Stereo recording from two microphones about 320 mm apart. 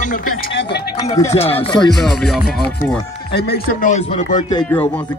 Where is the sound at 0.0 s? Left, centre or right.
Left.